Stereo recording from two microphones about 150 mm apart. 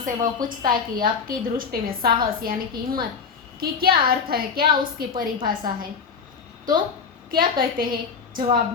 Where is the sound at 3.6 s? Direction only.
90° right; by 5.3 s 70° right (ahead or behind).